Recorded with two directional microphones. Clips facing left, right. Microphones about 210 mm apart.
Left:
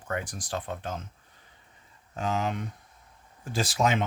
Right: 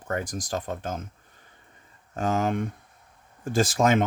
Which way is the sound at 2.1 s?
50° right (ahead or behind).